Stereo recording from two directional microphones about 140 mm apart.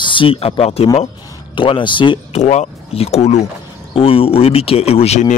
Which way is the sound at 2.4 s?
55° left (ahead or behind).